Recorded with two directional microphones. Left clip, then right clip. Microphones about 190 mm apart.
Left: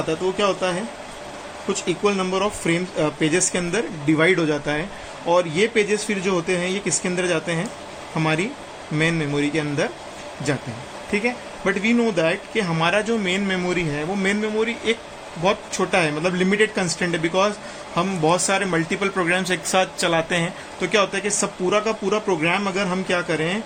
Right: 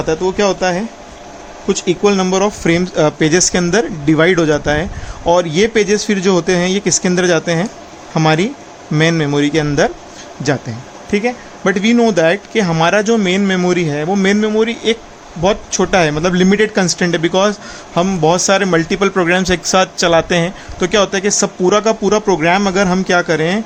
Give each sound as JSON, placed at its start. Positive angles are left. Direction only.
{"t": 0.1, "sound": "speech", "side_deg": -55}
{"t": 11.1, "sound": "speech", "side_deg": -50}